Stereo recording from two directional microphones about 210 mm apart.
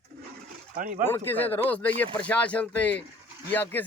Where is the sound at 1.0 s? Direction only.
10° left (ahead or behind).